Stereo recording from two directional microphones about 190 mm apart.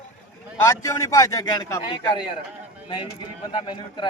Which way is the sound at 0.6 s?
15° left (ahead or behind).